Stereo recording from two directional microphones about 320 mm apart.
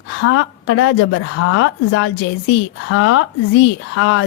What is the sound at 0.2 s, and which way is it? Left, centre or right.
A woman's voice, left.